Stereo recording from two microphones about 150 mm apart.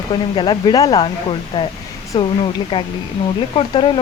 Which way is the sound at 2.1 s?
30° left (ahead or behind).